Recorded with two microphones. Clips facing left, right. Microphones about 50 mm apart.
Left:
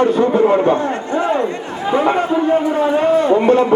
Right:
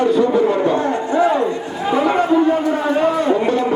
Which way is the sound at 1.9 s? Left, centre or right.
Left.